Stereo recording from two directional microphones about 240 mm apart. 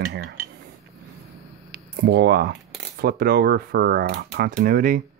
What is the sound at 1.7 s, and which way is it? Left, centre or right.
Speech, right.